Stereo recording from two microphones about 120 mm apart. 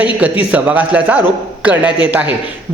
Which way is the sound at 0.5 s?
15° right (ahead or behind).